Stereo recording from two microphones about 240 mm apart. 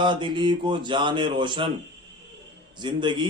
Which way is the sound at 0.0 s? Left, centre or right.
Centre.